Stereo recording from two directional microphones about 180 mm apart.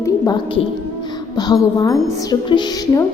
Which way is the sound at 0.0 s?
20° left (ahead or behind).